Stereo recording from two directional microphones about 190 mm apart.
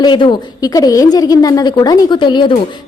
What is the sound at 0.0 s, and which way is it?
A woman's voice, 25° left (ahead or behind).